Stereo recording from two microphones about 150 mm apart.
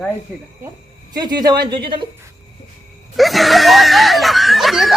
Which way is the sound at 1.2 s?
30° right (ahead or behind).